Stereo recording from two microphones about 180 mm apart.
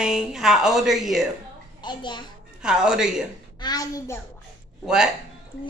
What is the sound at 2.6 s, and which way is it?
Speech, 5° right (ahead or behind).